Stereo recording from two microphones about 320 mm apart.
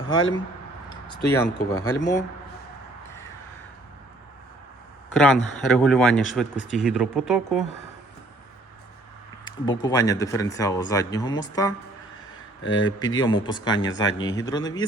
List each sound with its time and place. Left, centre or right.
1.1 s speech: centre
1.7 s speech: left
5.1 s speech: centre
9.4 s speech: centre
12.6 s speech: left
13.0 s speech: centre